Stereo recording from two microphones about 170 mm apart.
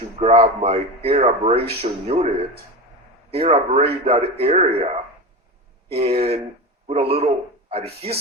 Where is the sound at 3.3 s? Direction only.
35° right (ahead or behind).